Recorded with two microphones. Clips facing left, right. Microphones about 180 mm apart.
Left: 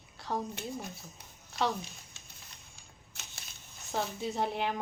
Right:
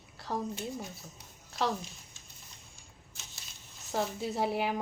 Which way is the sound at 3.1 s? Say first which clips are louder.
Left 3 dB; 65° left (ahead or behind).